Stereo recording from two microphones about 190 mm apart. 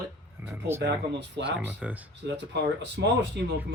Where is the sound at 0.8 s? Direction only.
65° right (ahead or behind).